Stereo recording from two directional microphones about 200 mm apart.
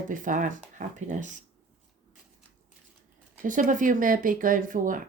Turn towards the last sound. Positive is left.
turn(degrees=-40)  # may be behind; listen again after turning